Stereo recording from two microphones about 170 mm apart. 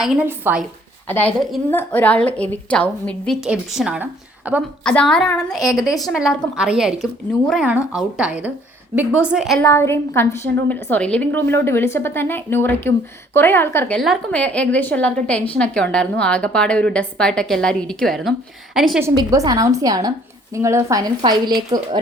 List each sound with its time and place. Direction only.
0.3 s speech: 10° right (ahead or behind)
1.0 s a woman's voice: 10° left (ahead or behind)
1.4 s a woman's voice: centre (ahead or behind)
4.8 s a woman's voice: 5° left (ahead or behind)
9.6 s a woman's voice: 15° left (ahead or behind); by 19.0 s centre (ahead or behind)
19.0 s a woman's voice: 20° right (ahead or behind)